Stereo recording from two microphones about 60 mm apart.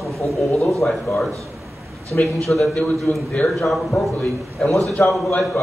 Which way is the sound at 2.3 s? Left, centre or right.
Centre.